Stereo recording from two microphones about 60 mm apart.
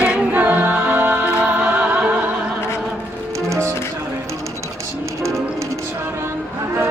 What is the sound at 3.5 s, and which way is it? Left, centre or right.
Music, right.